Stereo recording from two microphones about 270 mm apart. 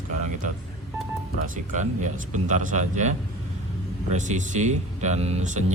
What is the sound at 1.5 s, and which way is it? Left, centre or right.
Speech, right.